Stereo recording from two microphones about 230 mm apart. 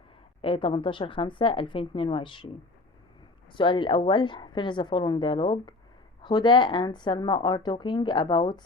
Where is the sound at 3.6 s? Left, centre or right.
Left.